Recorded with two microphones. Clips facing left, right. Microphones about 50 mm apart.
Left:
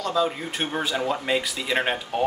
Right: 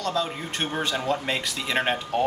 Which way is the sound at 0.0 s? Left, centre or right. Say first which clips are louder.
Left 3 dB; centre.